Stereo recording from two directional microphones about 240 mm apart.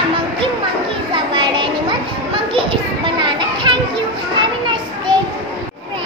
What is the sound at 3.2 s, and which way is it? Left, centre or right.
Children playing, centre.